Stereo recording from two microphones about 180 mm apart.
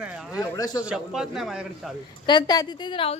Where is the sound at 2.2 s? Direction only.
25° left (ahead or behind).